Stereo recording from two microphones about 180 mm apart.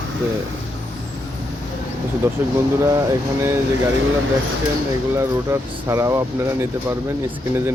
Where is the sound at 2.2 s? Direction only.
15° right (ahead or behind).